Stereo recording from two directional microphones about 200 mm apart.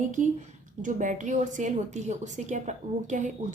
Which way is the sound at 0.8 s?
40° right (ahead or behind).